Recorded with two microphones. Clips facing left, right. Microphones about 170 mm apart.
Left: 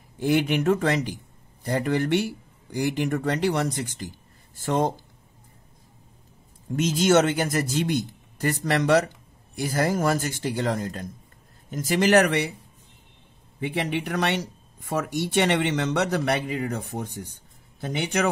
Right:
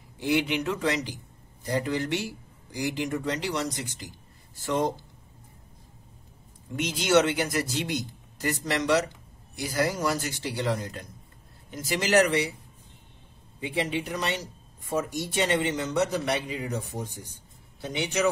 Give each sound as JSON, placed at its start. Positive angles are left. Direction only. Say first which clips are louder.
{"t": 0.2, "sound": "speech", "louder": "left 4 dB", "side_deg": 50}
{"t": 6.8, "sound": "speech", "louder": "left 3 dB", "side_deg": 45}
{"t": 13.6, "sound": "speech", "louder": "left 2 dB", "side_deg": 60}